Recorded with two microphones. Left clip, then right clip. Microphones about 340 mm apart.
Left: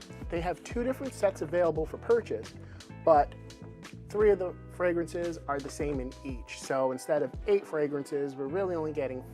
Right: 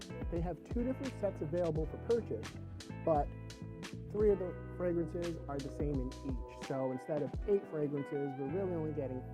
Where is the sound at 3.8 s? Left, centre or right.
Centre.